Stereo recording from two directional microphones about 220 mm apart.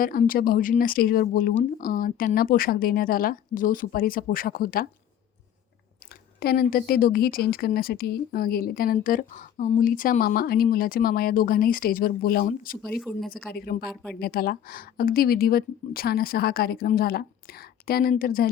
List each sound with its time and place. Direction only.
0.0 s speech: 40° left (ahead or behind)
6.4 s speech: 45° left (ahead or behind)
13.1 s speech: 10° left (ahead or behind)
13.5 s speech: 45° left (ahead or behind)
13.9 s speech: 5° left (ahead or behind)
14.2 s speech: 40° left (ahead or behind)